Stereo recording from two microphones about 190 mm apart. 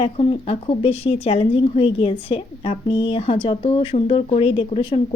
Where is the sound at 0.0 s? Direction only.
30° left (ahead or behind).